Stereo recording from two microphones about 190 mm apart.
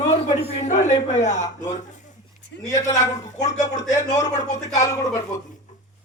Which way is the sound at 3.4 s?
40° left (ahead or behind).